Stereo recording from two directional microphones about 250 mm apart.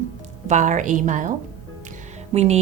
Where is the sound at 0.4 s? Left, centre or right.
Right.